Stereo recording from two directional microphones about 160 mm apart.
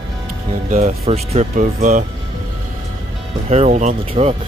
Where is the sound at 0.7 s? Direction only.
45° right (ahead or behind).